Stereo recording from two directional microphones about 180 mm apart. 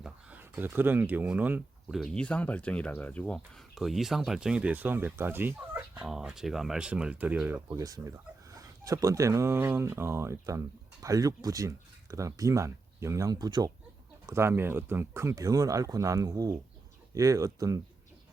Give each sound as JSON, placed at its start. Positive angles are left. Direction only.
{"t": 0.0, "sound": "speech", "side_deg": -10}
{"t": 2.0, "sound": "speech", "side_deg": 5}